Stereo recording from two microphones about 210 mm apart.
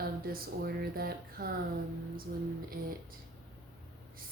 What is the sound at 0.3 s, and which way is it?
Speech, 45° right (ahead or behind).